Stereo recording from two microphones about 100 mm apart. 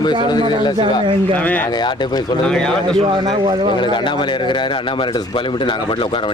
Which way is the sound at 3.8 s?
50° left (ahead or behind).